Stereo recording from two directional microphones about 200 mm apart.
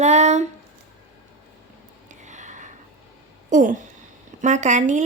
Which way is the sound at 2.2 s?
35° right (ahead or behind).